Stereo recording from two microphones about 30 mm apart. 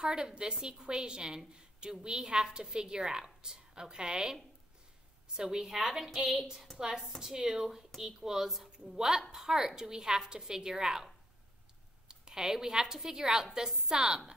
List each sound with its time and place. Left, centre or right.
0.0 s a woman's voice: right
5.7 s a woman's voice: centre
6.3 s a woman's voice: right
12.1 s a woman's voice: right